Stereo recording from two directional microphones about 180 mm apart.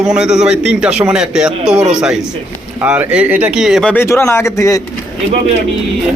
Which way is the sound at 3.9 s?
15° left (ahead or behind).